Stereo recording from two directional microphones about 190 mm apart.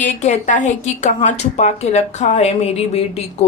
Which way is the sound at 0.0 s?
40° left (ahead or behind).